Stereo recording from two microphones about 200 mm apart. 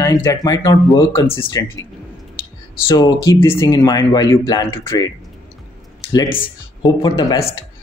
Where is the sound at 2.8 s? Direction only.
20° left (ahead or behind).